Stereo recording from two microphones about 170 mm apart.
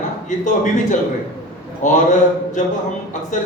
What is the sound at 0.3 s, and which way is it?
Speech, 45° left (ahead or behind).